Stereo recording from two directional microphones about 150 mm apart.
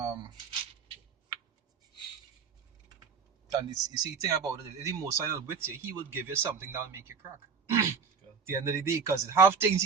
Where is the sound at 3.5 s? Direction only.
25° right (ahead or behind).